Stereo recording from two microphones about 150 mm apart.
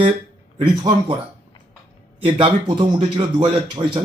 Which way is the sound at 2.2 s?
35° right (ahead or behind).